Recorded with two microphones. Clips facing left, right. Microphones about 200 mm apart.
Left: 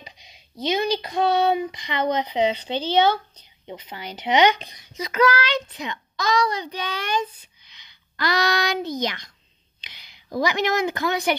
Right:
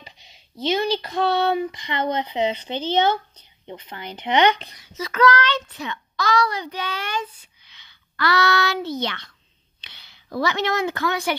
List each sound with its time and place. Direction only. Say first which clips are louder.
0.0 s a woman's voice: left 1 dB; 15° left (ahead or behind)